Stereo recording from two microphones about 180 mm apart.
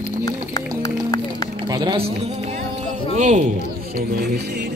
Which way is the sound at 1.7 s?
25° right (ahead or behind).